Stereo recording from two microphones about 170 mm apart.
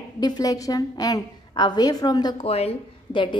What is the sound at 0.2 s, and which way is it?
A woman's voice, 20° left (ahead or behind).